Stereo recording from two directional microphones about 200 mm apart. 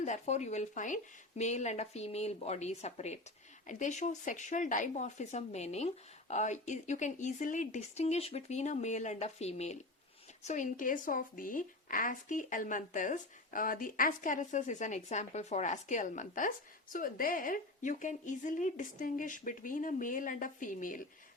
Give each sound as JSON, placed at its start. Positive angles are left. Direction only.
{"t": 0.0, "sound": "speech", "side_deg": 35}